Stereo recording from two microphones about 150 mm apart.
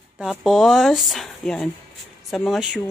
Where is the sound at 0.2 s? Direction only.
Centre (ahead or behind).